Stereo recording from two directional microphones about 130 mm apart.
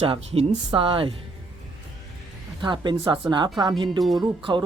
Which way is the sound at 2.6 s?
35° right (ahead or behind).